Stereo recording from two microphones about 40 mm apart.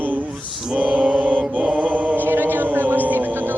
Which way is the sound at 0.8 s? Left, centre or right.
Right.